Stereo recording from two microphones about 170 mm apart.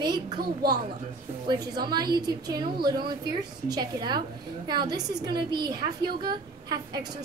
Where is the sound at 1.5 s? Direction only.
25° right (ahead or behind).